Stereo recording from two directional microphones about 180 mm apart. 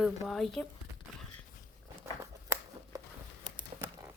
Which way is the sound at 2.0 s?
15° right (ahead or behind).